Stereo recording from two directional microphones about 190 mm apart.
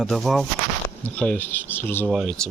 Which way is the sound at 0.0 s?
Centre (ahead or behind).